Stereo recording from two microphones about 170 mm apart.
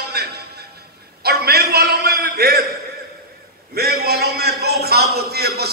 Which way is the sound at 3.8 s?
65° right (ahead or behind).